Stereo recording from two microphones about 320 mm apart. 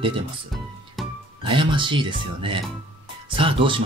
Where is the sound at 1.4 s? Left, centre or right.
Centre.